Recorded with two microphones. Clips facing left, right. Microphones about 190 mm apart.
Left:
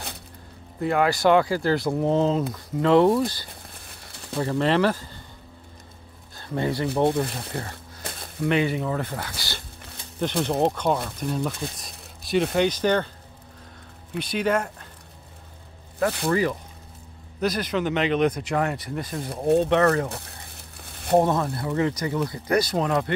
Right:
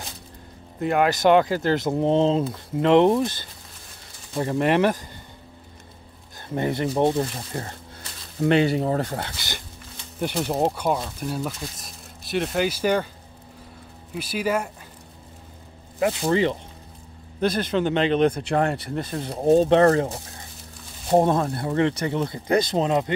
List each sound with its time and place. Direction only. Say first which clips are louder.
0.8 s speech: right 1 dB; 20° right (ahead or behind)
6.5 s speech: right 1 dB; 20° right (ahead or behind)
8.4 s speech: right 4 dB; 30° right (ahead or behind)
10.2 s speech: left 1 dB; 5° right (ahead or behind)
14.1 s speech: left 1 dB; 5° right (ahead or behind)
16.0 s speech: right 2 dB; 20° right (ahead or behind)
20.1 s a sound: right 1 dB; 65° left (ahead or behind)
21.2 s speech: right 2 dB; 20° right (ahead or behind)